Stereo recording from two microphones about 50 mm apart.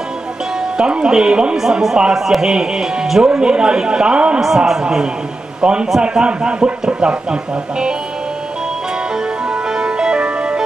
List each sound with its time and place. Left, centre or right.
0.7 s speech: centre
1.6 s speech: centre
9.5 s music: centre